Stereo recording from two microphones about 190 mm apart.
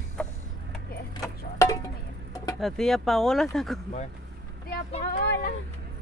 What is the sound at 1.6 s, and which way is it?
Music, 15° left (ahead or behind).